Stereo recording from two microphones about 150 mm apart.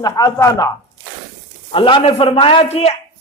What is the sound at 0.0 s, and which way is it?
Speech, 25° left (ahead or behind).